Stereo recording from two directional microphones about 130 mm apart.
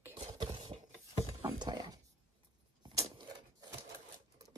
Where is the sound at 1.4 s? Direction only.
35° right (ahead or behind).